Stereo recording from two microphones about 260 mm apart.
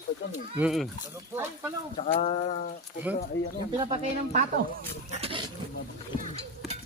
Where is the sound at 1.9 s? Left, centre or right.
Left.